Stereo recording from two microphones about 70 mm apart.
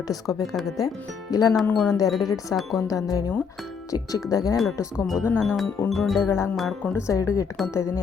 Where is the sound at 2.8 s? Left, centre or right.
Left.